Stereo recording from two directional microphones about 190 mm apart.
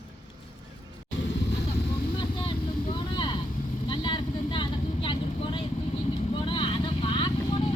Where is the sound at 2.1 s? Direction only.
25° left (ahead or behind).